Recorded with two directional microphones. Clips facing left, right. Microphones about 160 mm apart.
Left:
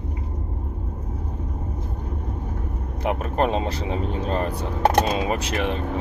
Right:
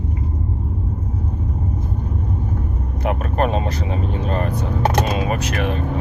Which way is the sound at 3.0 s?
25° left (ahead or behind).